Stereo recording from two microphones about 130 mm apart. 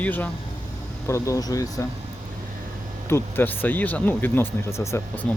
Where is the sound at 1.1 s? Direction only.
25° left (ahead or behind).